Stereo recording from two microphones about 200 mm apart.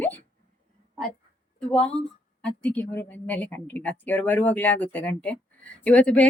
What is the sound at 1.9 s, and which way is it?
Speech, 5° left (ahead or behind).